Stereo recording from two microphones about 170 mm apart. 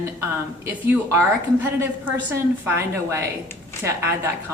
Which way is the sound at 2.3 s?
15° right (ahead or behind).